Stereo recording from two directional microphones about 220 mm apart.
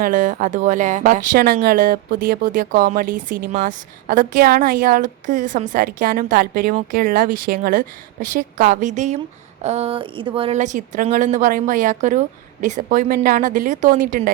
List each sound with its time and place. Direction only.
0.0 s speech: 35° right (ahead or behind)